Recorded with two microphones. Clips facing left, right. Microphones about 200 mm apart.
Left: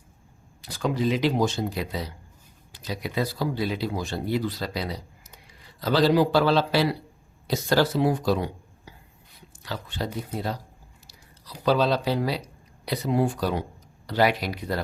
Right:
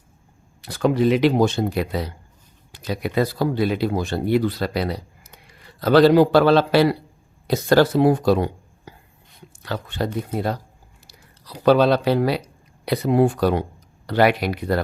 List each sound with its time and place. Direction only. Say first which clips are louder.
0.6 s speech: right 7 dB; 60° right (ahead or behind)